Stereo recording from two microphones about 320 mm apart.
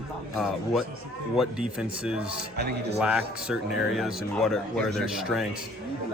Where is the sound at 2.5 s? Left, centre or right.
Right.